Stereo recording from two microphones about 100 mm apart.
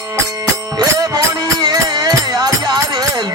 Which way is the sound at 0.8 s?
40° right (ahead or behind).